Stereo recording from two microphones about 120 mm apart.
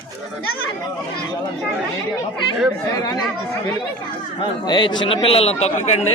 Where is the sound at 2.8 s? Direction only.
30° left (ahead or behind).